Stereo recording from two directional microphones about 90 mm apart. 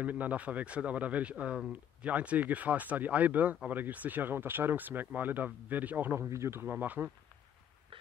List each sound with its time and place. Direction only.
0.0 s speech: 15° right (ahead or behind)
6.2 s speech: 30° right (ahead or behind)